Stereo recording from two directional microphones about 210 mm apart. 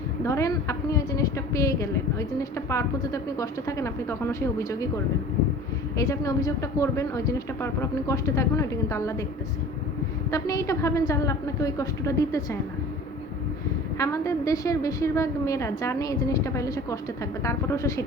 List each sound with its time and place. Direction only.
0.3 s a woman's voice: 15° left (ahead or behind)
6.0 s a woman's voice: 15° left (ahead or behind)
10.3 s a woman's voice: 15° left (ahead or behind)
14.0 s a woman's voice: 15° left (ahead or behind)